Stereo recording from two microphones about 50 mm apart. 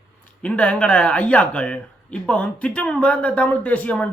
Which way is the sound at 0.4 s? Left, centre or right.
Left.